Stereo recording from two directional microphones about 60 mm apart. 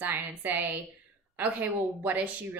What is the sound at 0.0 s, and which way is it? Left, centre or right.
A woman's voice, right.